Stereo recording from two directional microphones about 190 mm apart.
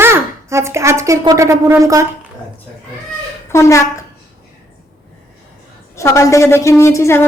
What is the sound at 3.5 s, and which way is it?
Speech, 15° left (ahead or behind).